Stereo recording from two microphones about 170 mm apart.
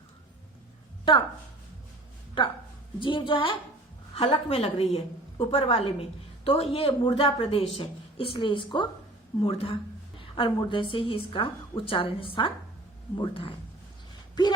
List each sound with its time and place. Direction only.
2.4 s a woman's voice: 30° left (ahead or behind)